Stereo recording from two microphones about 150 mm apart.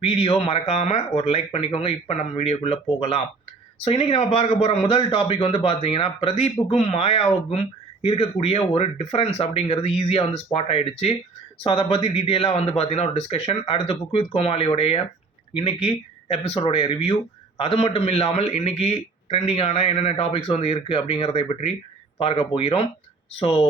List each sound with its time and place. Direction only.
0.0 s a man's voice: 40° left (ahead or behind)